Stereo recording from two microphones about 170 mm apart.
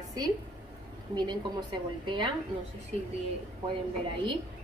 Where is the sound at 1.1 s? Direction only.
25° right (ahead or behind).